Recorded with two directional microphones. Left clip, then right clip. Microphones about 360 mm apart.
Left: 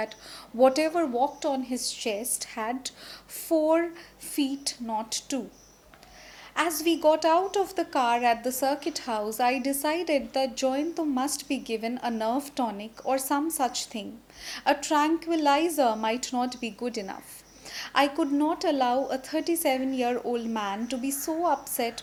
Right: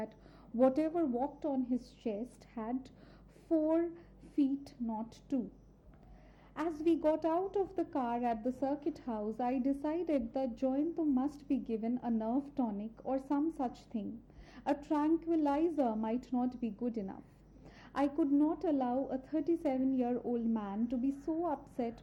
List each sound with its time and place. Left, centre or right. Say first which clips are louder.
0.7 s a woman's voice: left 8 dB; centre
1.1 s a woman's voice: left 11 dB; centre
1.4 s a woman's voice: left 8 dB; centre
6.7 s a woman's voice: left 8 dB; centre